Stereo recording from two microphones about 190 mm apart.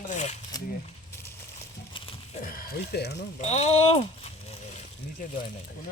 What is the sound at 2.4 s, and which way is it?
Speech, 50° left (ahead or behind).